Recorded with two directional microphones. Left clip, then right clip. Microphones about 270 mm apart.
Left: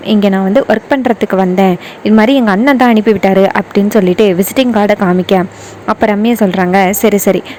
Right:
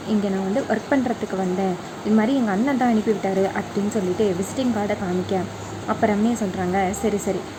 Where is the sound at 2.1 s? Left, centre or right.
Left.